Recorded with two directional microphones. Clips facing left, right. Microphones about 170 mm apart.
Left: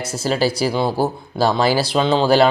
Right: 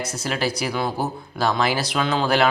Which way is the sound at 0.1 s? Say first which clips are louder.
Left 11 dB; 30° left (ahead or behind).